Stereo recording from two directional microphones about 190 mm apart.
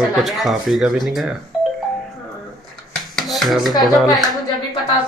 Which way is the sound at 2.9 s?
Centre (ahead or behind).